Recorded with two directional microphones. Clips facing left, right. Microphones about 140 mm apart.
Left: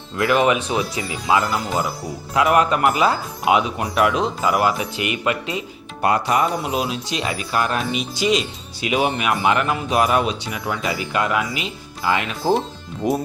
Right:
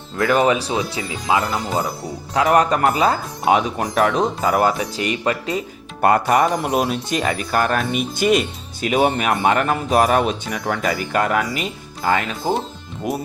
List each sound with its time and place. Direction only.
0.3 s speech: 35° right (ahead or behind)
12.4 s speech: centre (ahead or behind)